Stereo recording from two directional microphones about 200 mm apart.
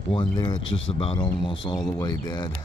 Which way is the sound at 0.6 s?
75° left (ahead or behind).